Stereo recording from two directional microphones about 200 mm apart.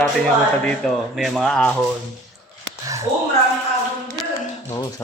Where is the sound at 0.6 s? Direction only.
5° left (ahead or behind).